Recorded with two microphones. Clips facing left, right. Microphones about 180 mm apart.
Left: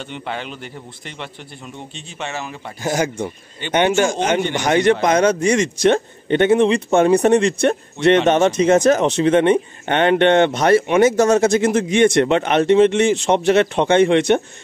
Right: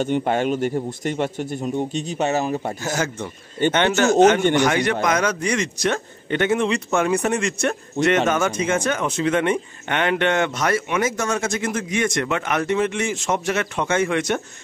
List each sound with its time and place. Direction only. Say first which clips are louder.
0.0 s a man's voice: right 8 dB; 45° right (ahead or behind)
2.8 s speech: left 4 dB; 15° left (ahead or behind)
4.6 s speech: left 5 dB; 25° left (ahead or behind)